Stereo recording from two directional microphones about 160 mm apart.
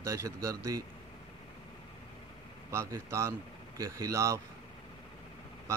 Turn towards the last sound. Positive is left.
turn(degrees=-20)  # may be behind; listen again after turning